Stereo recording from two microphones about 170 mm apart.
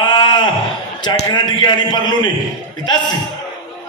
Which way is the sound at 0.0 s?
25° left (ahead or behind).